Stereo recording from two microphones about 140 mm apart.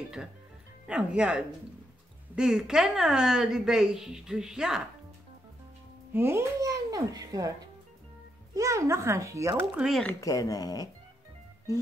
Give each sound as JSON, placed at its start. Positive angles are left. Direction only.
{"t": 0.8, "sound": "a woman's voice", "side_deg": -5}
{"t": 6.1, "sound": "a child's voice", "side_deg": -20}
{"t": 8.5, "sound": "a child's voice", "side_deg": -20}
{"t": 9.8, "sound": "a woman's voice", "side_deg": 0}
{"t": 10.2, "sound": "speech", "side_deg": 25}